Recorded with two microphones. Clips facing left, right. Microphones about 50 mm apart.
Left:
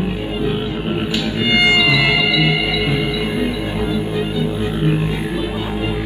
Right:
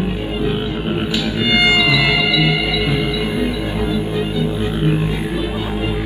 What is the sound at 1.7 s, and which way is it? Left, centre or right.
Music, left.